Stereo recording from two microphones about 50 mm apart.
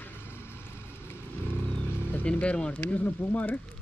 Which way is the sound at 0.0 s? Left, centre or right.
Left.